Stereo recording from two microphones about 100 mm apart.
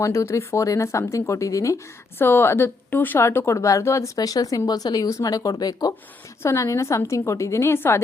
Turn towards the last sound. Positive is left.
turn(degrees=25)  # may be behind; listen again after turning